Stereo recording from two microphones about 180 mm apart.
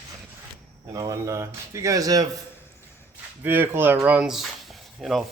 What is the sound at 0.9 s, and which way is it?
Speech, 20° right (ahead or behind).